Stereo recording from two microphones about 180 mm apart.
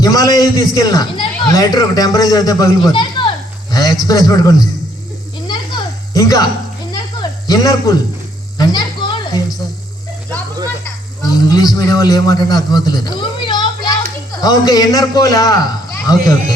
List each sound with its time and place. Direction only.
0.0 s a man's voice: 20° left (ahead or behind)
5.5 s a sound: 20° left (ahead or behind)
11.2 s a man's voice: 20° left (ahead or behind)